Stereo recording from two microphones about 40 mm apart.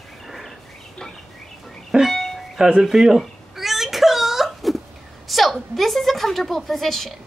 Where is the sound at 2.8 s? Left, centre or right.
Centre.